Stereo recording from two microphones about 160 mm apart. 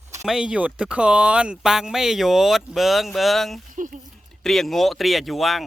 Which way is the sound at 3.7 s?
50° right (ahead or behind).